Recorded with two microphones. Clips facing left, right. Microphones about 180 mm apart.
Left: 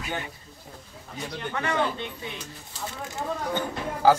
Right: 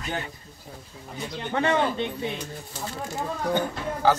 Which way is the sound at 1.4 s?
25° right (ahead or behind).